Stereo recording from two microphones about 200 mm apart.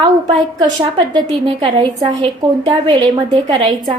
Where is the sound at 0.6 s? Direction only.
20° right (ahead or behind).